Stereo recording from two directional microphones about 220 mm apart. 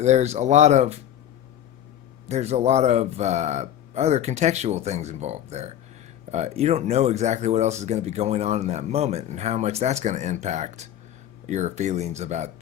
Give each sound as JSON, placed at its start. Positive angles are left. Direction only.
{"t": 0.0, "sound": "speech", "side_deg": -30}
{"t": 2.2, "sound": "speech", "side_deg": -30}